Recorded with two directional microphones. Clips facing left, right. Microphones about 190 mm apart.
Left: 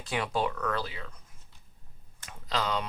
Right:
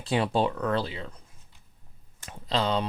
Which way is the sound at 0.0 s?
30° right (ahead or behind).